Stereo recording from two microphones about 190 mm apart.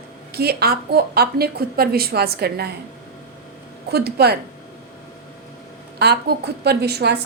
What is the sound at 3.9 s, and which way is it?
Speech, 60° right (ahead or behind).